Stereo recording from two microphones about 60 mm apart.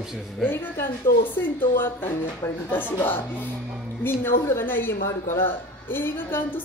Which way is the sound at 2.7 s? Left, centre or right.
Left.